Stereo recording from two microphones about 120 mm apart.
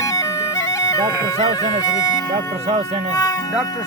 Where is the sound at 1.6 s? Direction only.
30° left (ahead or behind).